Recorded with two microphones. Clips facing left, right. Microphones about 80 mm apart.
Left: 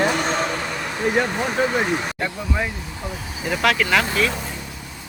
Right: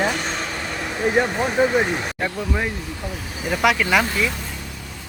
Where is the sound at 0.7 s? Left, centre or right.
Centre.